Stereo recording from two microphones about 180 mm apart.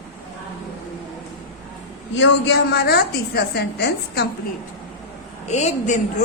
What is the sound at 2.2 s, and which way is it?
A woman's voice, 80° left.